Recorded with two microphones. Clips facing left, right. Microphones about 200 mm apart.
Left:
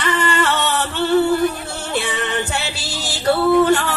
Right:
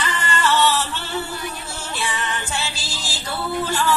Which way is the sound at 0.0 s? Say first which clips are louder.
Left 4 dB; 65° left (ahead or behind).